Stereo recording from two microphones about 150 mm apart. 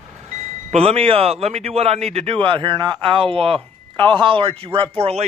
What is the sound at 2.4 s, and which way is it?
Speech, 35° right (ahead or behind).